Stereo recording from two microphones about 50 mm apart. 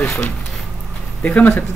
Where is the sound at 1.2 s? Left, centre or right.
Left.